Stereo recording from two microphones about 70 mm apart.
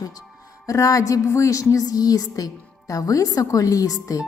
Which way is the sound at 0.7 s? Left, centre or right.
Left.